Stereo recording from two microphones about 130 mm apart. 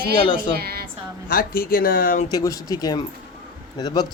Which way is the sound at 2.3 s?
30° left (ahead or behind).